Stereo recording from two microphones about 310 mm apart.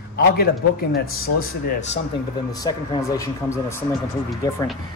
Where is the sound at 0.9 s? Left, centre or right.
Left.